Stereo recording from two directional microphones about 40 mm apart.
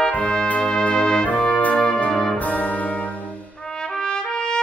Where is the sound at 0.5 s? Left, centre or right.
Left.